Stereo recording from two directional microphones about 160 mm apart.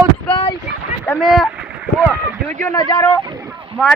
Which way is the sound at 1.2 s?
Centre (ahead or behind).